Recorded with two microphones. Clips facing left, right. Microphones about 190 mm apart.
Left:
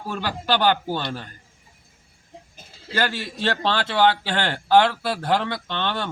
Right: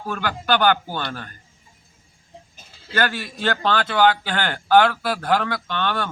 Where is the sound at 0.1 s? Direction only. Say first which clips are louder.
Right 2 dB; 25° left (ahead or behind).